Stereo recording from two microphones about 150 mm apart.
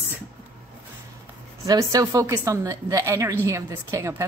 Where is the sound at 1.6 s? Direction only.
25° right (ahead or behind).